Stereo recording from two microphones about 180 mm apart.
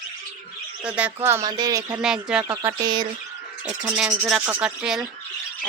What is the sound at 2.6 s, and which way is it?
Speech, 25° right (ahead or behind).